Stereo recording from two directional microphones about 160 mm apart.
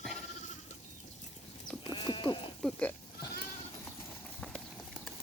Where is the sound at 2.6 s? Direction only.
5° left (ahead or behind).